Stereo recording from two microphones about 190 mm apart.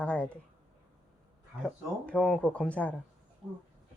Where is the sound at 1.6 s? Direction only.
5° left (ahead or behind).